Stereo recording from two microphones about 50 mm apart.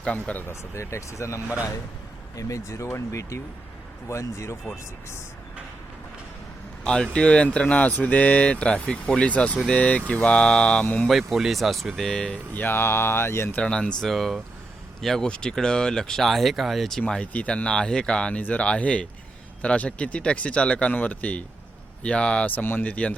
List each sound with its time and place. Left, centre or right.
0.0 s speech: left
0.4 s speech: left
2.5 s speech: left
6.8 s speech: left
11.1 s speech: centre
12.0 s speech: centre
12.5 s speech: left
13.6 s speech: centre
14.1 s speech: centre
17.2 s speech: left
18.3 s speech: left
20.9 s speech: left
22.4 s speech: left
22.8 s speech: left